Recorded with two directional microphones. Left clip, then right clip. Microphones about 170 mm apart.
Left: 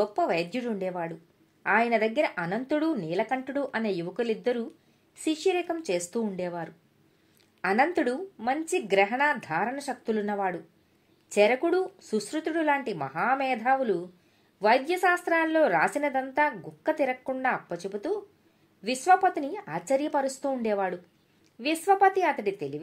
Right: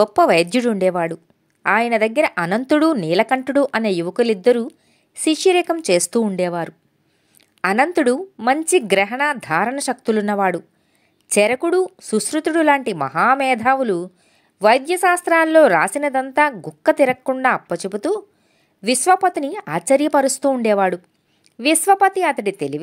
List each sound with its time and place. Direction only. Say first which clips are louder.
0.0 s a woman's voice: right 13 dB; 50° right (ahead or behind)